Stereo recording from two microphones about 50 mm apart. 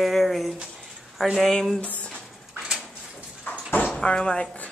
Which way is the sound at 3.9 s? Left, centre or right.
Centre.